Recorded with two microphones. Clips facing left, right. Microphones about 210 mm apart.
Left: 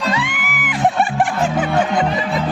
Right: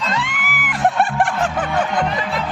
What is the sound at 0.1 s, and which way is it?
Music, centre (ahead or behind).